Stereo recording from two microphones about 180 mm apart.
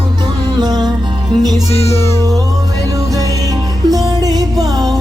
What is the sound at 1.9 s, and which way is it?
Music, 15° left (ahead or behind).